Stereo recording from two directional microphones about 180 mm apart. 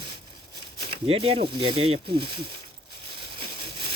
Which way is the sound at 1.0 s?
30° right (ahead or behind).